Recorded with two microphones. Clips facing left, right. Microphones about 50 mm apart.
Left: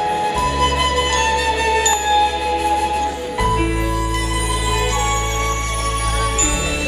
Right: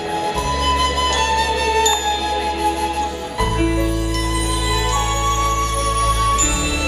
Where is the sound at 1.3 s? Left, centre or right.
Centre.